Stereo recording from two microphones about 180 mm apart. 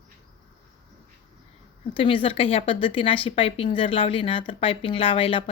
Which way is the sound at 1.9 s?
30° left (ahead or behind).